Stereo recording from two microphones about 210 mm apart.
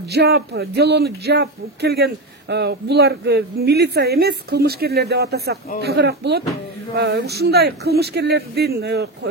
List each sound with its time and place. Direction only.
0.1 s speech: 50° right (ahead or behind)